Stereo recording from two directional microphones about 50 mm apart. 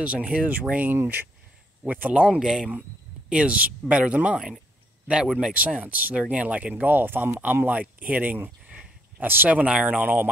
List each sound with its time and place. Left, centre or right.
0.0 s speech: right
0.6 s speech: right
1.9 s speech: right
2.2 s speech: centre
3.3 s speech: right
5.6 s speech: right
6.7 s speech: right
7.6 s speech: right
9.2 s speech: right
9.5 s speech: right